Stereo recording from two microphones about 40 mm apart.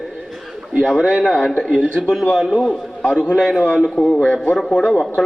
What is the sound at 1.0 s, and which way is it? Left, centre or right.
Speech, right.